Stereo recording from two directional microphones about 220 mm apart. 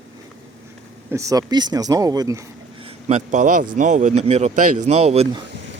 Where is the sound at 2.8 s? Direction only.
30° right (ahead or behind).